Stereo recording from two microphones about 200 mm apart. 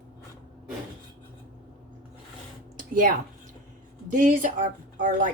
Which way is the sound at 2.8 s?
45° right (ahead or behind).